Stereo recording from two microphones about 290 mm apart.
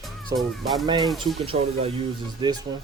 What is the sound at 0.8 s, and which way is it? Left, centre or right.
Speech, centre.